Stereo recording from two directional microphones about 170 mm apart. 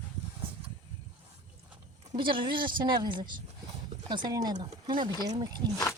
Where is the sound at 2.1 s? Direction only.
30° right (ahead or behind).